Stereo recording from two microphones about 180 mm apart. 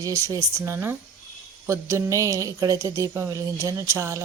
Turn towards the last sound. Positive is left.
turn(degrees=-15)  # may be behind; listen again after turning